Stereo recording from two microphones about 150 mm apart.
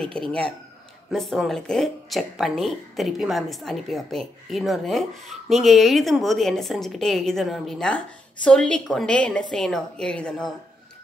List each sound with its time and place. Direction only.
0.0 s speech: 5° left (ahead or behind)